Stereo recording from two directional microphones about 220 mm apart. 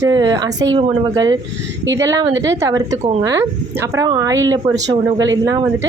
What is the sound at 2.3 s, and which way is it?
Speech, 55° right (ahead or behind).